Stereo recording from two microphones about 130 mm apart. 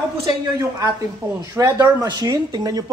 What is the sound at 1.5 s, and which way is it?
Speech, 25° right (ahead or behind).